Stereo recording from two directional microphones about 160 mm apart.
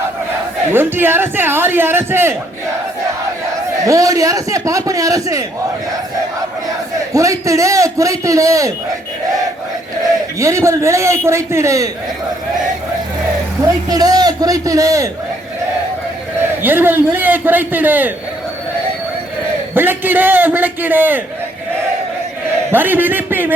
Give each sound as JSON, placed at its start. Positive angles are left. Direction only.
{"t": 0.7, "sound": "a man's voice", "side_deg": -15}
{"t": 3.8, "sound": "a man's voice", "side_deg": -20}
{"t": 7.1, "sound": "a man's voice", "side_deg": -20}
{"t": 10.4, "sound": "a man's voice", "side_deg": -20}
{"t": 13.9, "sound": "a man's voice", "side_deg": -25}
{"t": 16.4, "sound": "a man's voice", "side_deg": -10}
{"t": 19.7, "sound": "a man's voice", "side_deg": -15}
{"t": 22.7, "sound": "a man's voice", "side_deg": -10}